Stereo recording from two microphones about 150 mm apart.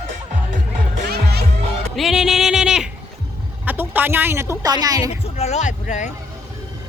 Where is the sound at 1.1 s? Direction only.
90° right.